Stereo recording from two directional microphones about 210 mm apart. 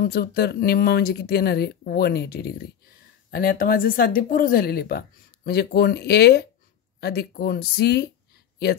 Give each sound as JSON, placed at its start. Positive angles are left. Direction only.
{"t": 0.0, "sound": "speech", "side_deg": 45}